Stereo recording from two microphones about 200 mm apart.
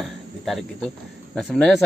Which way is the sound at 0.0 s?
Centre (ahead or behind).